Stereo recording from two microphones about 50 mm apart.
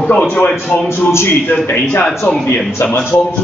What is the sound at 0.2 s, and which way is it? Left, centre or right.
Speech, left.